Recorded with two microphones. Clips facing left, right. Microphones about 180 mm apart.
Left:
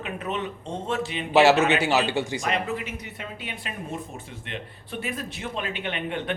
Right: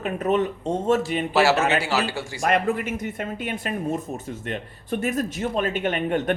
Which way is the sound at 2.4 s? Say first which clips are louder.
Right 6 dB; 50° right (ahead or behind).